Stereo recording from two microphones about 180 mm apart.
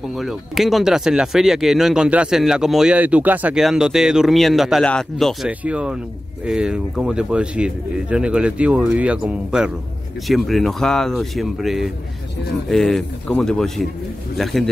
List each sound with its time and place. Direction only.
0.1 s speech: centre (ahead or behind)